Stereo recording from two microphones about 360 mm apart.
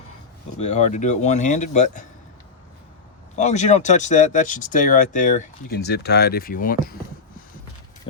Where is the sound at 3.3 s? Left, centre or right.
Centre.